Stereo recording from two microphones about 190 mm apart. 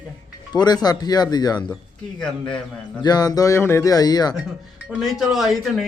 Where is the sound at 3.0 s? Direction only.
20° left (ahead or behind).